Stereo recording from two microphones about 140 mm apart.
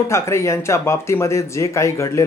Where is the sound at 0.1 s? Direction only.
20° left (ahead or behind).